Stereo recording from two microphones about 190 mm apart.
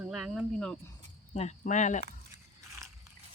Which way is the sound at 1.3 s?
35° left (ahead or behind).